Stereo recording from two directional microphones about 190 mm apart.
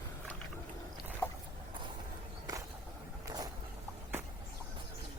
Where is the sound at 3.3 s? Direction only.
20° right (ahead or behind).